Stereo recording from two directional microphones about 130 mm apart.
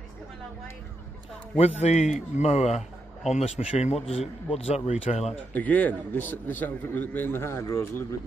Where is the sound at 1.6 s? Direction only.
55° left (ahead or behind).